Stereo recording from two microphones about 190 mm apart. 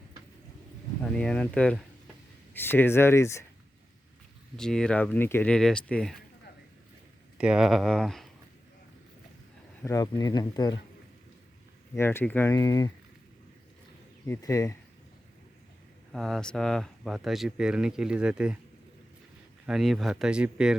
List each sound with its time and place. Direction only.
1.0 s speech: 5° left (ahead or behind)
4.5 s speech: 5° left (ahead or behind)
7.3 s speech: 5° right (ahead or behind)
9.8 s speech: 20° left (ahead or behind)
11.9 s speech: 10° left (ahead or behind)
14.3 s speech: 15° left (ahead or behind)
16.1 s speech: centre (ahead or behind)
19.6 s speech: centre (ahead or behind)